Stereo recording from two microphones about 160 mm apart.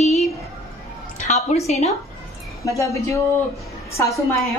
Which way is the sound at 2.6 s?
20° left (ahead or behind).